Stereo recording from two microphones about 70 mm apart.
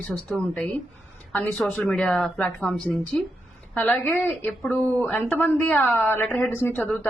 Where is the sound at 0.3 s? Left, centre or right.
Centre.